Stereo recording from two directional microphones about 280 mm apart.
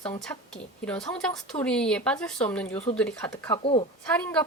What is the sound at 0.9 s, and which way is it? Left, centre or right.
Speech, centre.